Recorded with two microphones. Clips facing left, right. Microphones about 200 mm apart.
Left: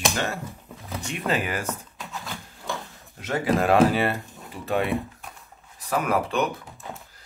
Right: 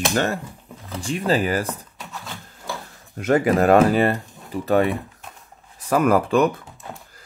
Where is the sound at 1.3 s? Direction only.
35° right (ahead or behind).